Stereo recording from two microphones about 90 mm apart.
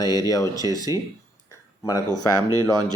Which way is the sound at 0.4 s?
40° right (ahead or behind).